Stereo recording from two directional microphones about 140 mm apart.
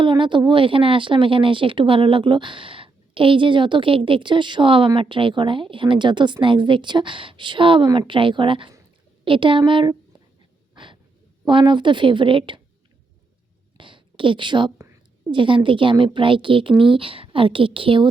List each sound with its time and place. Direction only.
0.0 s speech: 35° right (ahead or behind)
11.4 s speech: 35° right (ahead or behind)
13.7 s a sound: 35° right (ahead or behind)
15.3 s speech: 35° right (ahead or behind)